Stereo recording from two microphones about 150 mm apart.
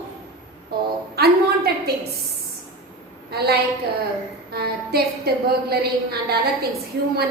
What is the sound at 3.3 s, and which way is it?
A woman's voice, 90° right.